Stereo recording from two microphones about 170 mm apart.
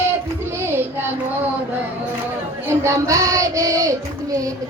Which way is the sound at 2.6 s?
15° right (ahead or behind).